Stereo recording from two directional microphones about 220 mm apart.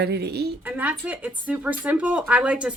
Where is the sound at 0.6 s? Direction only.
10° right (ahead or behind).